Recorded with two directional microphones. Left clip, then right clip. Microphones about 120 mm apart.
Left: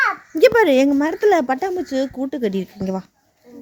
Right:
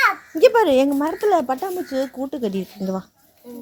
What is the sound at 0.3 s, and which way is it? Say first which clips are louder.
Speech: left 2 dB; 35° left (ahead or behind).